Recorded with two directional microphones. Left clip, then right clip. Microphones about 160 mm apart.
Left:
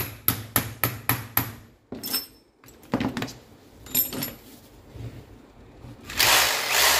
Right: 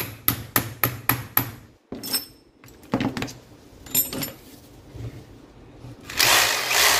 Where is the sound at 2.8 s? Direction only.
15° left (ahead or behind).